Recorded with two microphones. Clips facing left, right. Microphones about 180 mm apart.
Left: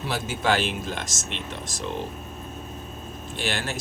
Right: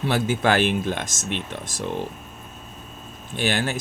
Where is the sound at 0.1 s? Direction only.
60° right (ahead or behind).